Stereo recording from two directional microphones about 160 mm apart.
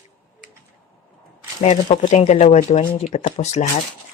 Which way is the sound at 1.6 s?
35° left (ahead or behind).